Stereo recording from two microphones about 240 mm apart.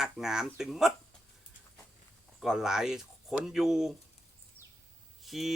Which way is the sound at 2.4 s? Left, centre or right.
Centre.